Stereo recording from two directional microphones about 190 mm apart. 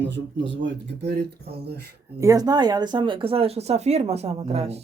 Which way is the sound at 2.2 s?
20° right (ahead or behind).